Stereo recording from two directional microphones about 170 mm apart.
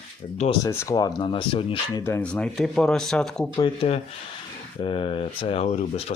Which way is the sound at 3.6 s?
35° left (ahead or behind).